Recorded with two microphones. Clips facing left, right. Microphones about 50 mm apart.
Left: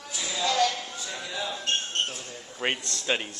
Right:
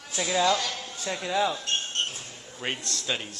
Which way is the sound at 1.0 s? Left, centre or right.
Right.